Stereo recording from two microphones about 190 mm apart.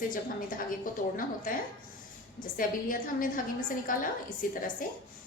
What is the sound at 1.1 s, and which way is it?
Speech, 45° left (ahead or behind).